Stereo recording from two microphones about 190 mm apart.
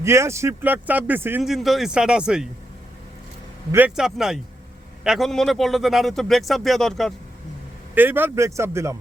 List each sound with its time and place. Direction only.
0.0 s speech: 15° right (ahead or behind)
3.7 s speech: 10° right (ahead or behind)
7.9 s speech: 10° right (ahead or behind)